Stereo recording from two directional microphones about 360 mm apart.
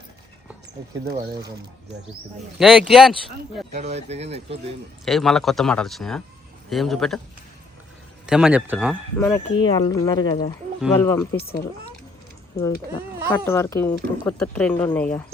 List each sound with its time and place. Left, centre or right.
2.6 s speech: centre
3.7 s speech: centre
5.0 s speech: centre
8.3 s speech: centre
11.3 s speech: left
12.5 s speech: centre